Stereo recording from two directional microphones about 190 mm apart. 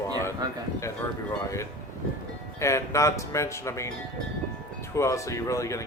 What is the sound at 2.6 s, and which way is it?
Speech, 15° left (ahead or behind).